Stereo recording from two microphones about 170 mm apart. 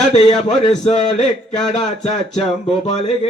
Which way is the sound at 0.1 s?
40° left (ahead or behind).